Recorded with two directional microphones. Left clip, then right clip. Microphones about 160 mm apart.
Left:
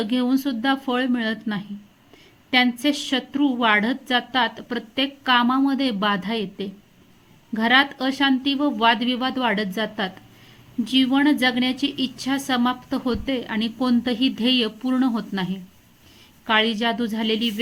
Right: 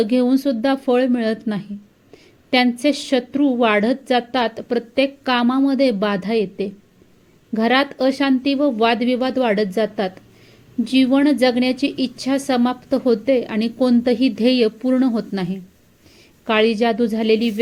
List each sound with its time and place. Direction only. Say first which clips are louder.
0.0 s a woman's voice: right 6 dB; 15° right (ahead or behind)